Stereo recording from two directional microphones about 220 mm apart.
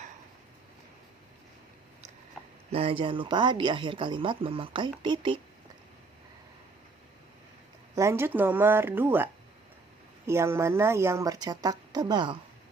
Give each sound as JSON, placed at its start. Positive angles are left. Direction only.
{"t": 2.6, "sound": "speech", "side_deg": -25}
{"t": 7.9, "sound": "a woman's voice", "side_deg": -10}